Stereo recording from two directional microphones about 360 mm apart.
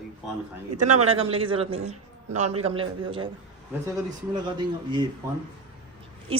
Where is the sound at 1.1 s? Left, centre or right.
Centre.